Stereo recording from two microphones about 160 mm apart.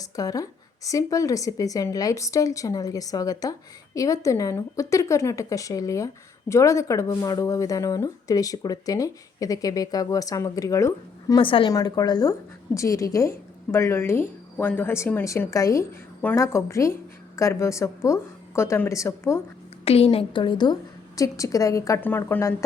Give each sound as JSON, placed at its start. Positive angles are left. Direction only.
{"t": 0.0, "sound": "speech", "side_deg": 20}
{"t": 11.3, "sound": "a woman's voice", "side_deg": 30}
{"t": 19.8, "sound": "a woman's voice", "side_deg": 40}